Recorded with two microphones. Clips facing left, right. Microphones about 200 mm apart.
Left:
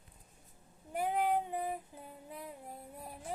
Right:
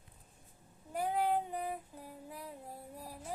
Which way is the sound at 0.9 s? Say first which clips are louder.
Left 1 dB; 20° left (ahead or behind).